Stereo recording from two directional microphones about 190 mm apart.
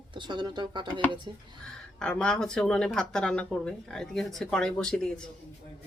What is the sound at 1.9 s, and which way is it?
Speech, 5° left (ahead or behind).